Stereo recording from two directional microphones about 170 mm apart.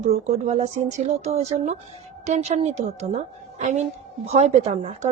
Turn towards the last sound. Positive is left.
turn(degrees=-45)  # may be behind; listen again after turning